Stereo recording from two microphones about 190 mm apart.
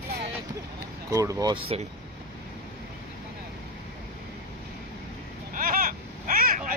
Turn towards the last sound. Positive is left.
turn(degrees=-45)  # may be behind; listen again after turning